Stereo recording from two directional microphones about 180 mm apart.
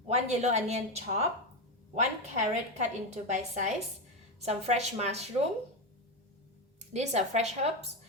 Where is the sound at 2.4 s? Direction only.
40° right (ahead or behind).